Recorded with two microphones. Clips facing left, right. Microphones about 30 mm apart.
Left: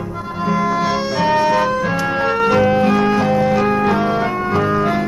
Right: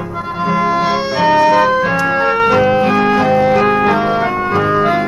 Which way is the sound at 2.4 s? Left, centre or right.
Centre.